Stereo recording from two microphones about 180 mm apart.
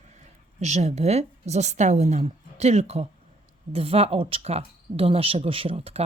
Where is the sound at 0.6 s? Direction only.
40° right (ahead or behind).